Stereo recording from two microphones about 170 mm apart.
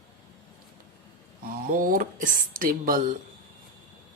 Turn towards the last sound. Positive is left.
turn(degrees=-55)  # may be behind; listen again after turning